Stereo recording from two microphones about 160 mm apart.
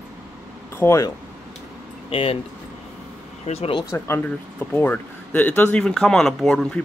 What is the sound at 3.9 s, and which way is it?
Speech, 15° left (ahead or behind).